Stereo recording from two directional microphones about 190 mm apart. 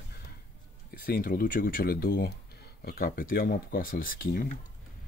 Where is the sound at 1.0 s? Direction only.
50° left (ahead or behind).